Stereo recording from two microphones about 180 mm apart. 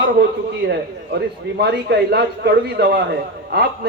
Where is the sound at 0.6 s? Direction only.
70° right (ahead or behind).